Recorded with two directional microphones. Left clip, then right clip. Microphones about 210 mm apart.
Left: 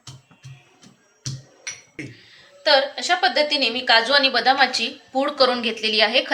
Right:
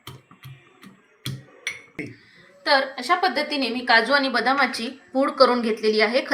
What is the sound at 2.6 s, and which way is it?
Speech, 40° left (ahead or behind).